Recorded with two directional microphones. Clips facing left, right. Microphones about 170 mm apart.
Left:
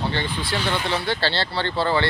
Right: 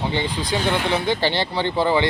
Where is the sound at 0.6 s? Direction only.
55° right (ahead or behind).